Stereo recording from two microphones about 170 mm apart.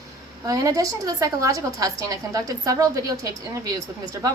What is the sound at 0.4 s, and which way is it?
A woman's voice, 20° right (ahead or behind).